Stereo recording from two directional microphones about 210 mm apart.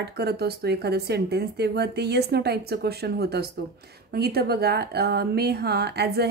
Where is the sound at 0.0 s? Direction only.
50° right (ahead or behind).